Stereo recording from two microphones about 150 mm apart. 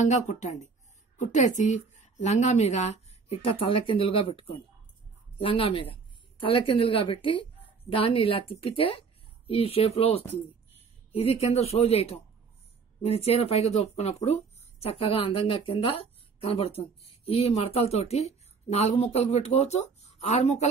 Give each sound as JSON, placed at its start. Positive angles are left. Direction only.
{"t": 0.0, "sound": "a woman's voice", "side_deg": 55}